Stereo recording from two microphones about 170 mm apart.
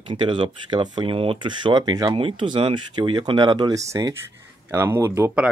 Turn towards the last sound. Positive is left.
turn(degrees=-15)  # may be behind; listen again after turning